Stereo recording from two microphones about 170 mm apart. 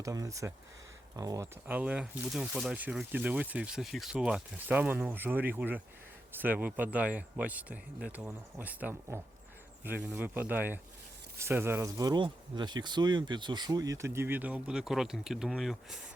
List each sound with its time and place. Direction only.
0.0 s speech: 20° right (ahead or behind); by 16.0 s centre (ahead or behind)